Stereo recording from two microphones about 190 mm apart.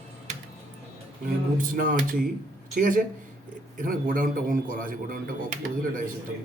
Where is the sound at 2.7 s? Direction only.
45° right (ahead or behind).